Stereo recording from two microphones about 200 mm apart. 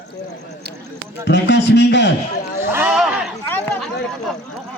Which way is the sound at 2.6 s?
10° right (ahead or behind).